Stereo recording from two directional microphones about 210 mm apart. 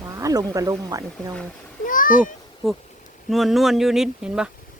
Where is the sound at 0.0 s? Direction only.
15° right (ahead or behind).